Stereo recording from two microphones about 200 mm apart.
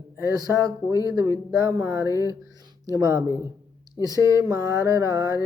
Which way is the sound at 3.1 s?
15° left (ahead or behind).